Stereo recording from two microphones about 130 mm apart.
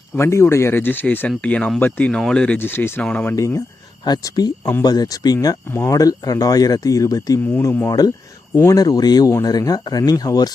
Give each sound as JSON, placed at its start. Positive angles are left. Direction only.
{"t": 0.2, "sound": "speech", "side_deg": 20}
{"t": 3.3, "sound": "speech", "side_deg": 25}
{"t": 5.6, "sound": "speech", "side_deg": 20}
{"t": 7.6, "sound": "speech", "side_deg": 15}
{"t": 7.9, "sound": "speech", "side_deg": 30}